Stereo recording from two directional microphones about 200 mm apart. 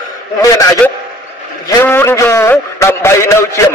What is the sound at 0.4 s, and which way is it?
A man's voice, 15° left (ahead or behind).